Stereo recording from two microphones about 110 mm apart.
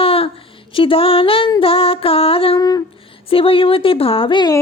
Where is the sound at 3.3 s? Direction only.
55° left (ahead or behind).